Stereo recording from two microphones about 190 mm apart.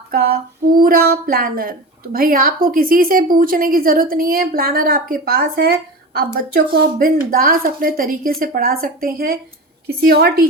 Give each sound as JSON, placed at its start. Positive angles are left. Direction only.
{"t": 0.1, "sound": "female singing", "side_deg": -55}
{"t": 0.8, "sound": "a woman's voice", "side_deg": -50}